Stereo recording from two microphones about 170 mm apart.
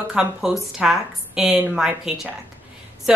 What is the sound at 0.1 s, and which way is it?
A child's voice, 5° right (ahead or behind).